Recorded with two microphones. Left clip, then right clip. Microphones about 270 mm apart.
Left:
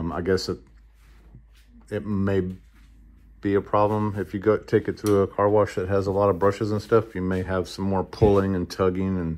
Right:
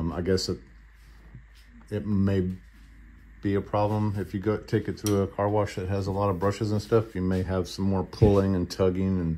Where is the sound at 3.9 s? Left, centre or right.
Left.